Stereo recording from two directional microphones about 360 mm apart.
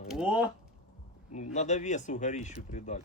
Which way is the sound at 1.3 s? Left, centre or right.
Centre.